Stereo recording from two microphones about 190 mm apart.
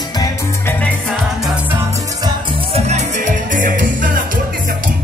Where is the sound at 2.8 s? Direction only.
35° right (ahead or behind).